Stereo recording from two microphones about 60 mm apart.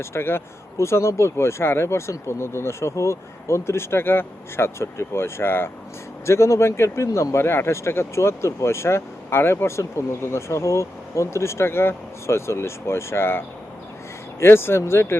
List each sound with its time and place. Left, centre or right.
0.0 s speech: left
6.2 s speech: left